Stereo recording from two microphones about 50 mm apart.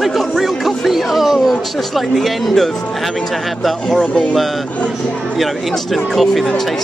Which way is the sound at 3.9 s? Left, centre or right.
Centre.